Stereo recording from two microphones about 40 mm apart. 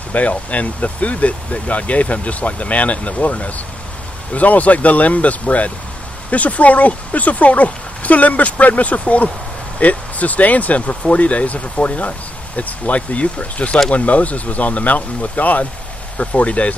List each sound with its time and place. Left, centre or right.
0.1 s speech: left